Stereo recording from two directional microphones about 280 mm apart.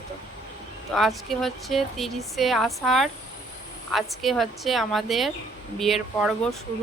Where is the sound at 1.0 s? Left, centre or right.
Centre.